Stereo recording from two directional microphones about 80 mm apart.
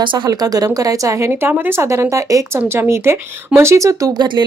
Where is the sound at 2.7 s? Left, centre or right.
Right.